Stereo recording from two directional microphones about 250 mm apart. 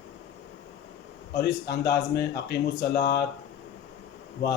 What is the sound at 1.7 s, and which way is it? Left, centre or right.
Speech, left.